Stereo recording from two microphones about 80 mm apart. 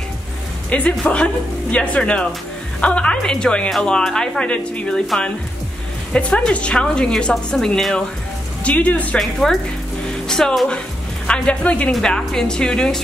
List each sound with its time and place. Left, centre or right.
0.7 s speech: centre
8.6 s speech: centre
9.2 s speech: centre
11.2 s speech: centre